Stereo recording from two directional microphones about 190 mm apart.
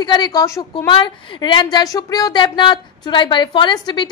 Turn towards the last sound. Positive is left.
turn(degrees=20)  # may be behind; listen again after turning